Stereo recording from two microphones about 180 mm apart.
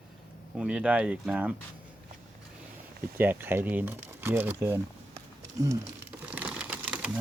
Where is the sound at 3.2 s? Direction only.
10° right (ahead or behind).